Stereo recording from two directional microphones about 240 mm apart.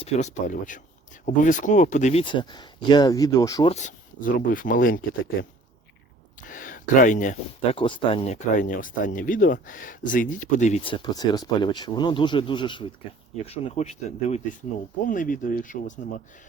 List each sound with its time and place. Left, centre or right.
0.0 s speech: left
6.5 s speech: left